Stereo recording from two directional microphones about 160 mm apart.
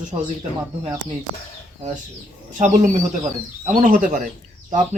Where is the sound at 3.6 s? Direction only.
55° right (ahead or behind).